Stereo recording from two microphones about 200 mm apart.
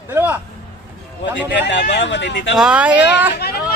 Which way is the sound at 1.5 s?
60° left (ahead or behind).